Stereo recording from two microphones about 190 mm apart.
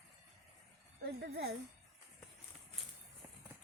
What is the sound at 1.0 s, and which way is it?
Speech, 60° right (ahead or behind).